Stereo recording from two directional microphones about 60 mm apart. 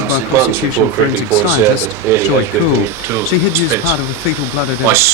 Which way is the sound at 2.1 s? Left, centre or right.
Right.